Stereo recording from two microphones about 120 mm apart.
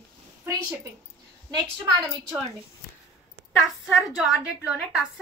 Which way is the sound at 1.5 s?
40° right (ahead or behind).